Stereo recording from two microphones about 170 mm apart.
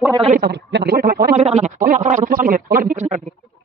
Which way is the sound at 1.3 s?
40° right (ahead or behind).